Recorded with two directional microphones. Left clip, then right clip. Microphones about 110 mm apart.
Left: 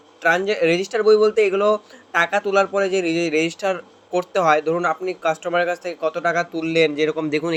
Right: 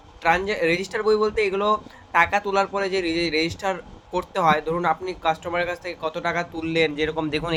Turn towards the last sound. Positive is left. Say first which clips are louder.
# left 3 dB
turn(degrees=15)  # may be behind; listen again after turning